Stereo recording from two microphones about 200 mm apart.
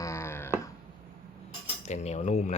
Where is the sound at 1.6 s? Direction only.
35° left (ahead or behind).